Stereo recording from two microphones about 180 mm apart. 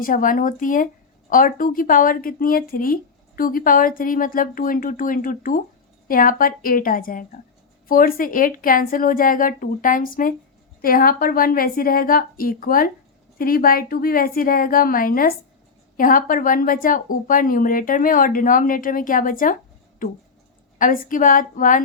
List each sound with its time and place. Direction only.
0.0 s speech: 50° left (ahead or behind)
20.7 s speech: 50° left (ahead or behind)